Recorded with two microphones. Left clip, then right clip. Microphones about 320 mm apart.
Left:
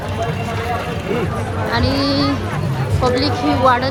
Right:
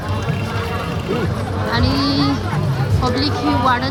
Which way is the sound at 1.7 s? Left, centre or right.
Centre.